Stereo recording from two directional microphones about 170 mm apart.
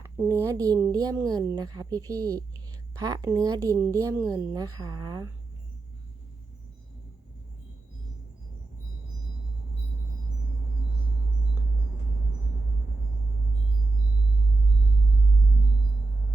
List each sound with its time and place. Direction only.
0.0 s a woman's voice: 15° right (ahead or behind)